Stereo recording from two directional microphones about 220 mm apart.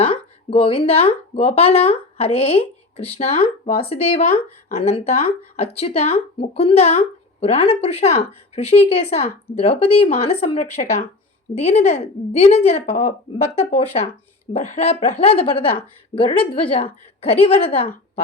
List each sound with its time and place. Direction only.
0.0 s speech: 25° left (ahead or behind)